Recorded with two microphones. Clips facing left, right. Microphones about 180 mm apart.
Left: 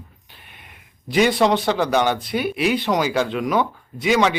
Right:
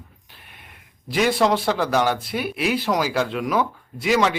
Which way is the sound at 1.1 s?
Centre (ahead or behind).